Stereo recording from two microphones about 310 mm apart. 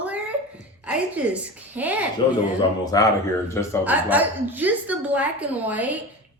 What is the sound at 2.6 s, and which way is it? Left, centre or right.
Speech, centre.